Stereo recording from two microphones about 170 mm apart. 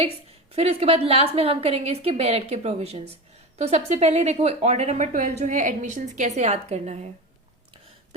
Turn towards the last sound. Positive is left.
turn(degrees=-40)  # may be behind; listen again after turning